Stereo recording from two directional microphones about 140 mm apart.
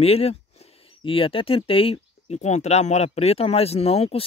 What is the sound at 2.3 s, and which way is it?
Speech, 55° left (ahead or behind).